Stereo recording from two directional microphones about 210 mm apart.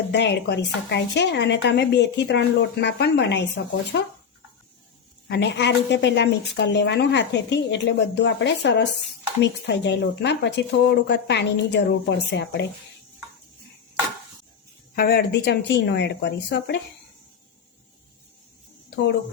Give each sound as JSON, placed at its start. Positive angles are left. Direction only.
{"t": 0.1, "sound": "a woman's voice", "side_deg": 55}
{"t": 5.3, "sound": "a woman's voice", "side_deg": 55}
{"t": 14.9, "sound": "speech", "side_deg": 45}